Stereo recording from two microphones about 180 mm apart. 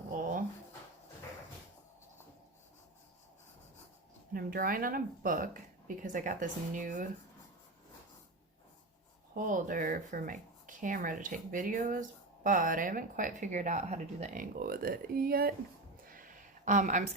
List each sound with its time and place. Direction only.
4.4 s speech: 55° right (ahead or behind)
9.3 s speech: 45° right (ahead or behind)
14.5 s speech: 55° right (ahead or behind)
16.0 s a sound: 50° right (ahead or behind)